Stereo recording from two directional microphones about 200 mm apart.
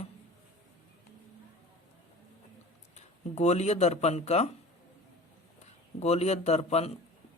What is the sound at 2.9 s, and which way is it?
Speech, 35° left (ahead or behind).